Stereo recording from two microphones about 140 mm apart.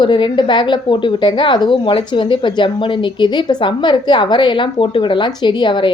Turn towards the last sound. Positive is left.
turn(degrees=35)  # may be behind; listen again after turning